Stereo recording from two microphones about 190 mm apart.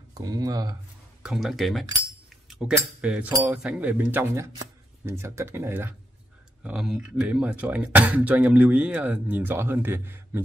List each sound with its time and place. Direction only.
0.1 s speech: 20° right (ahead or behind)
1.2 s speech: centre (ahead or behind)